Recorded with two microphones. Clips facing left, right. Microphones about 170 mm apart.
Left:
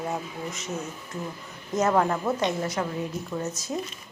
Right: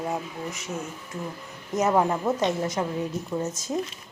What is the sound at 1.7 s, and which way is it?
A woman's voice, 15° right (ahead or behind).